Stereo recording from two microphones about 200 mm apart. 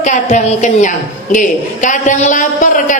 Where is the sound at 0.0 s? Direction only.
40° left (ahead or behind).